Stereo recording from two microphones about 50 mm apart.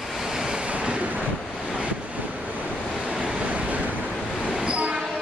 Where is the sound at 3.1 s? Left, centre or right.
Centre.